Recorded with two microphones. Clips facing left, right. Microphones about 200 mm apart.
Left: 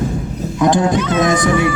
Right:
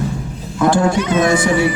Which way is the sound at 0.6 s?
15° left (ahead or behind).